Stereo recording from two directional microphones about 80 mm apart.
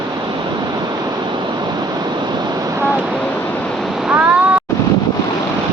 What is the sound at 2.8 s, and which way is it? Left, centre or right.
Waves, right.